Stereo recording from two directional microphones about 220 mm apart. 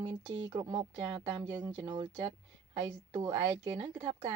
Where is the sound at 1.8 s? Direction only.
20° right (ahead or behind).